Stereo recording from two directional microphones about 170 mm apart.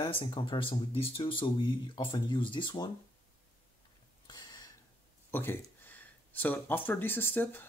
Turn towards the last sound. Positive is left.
turn(degrees=10)  # may be behind; listen again after turning